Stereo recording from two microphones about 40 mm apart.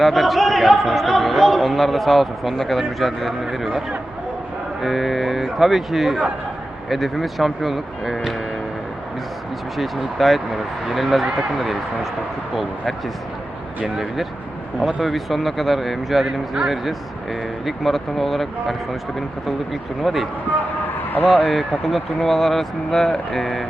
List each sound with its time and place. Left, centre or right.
0.0 s a man's voice: centre
9.7 s a man's voice: centre
13.8 s a man's voice: centre
20.0 s a man's voice: centre
20.8 s a sound: left
21.4 s a man's voice: centre
23.0 s speech: centre